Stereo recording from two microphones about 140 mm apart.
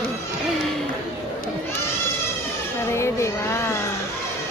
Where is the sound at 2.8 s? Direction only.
20° left (ahead or behind).